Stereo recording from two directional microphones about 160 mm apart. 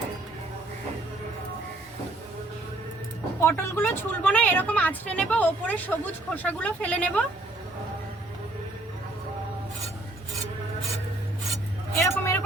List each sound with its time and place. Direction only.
3.4 s speech: 15° left (ahead or behind)
12.0 s vehicle: 15° left (ahead or behind)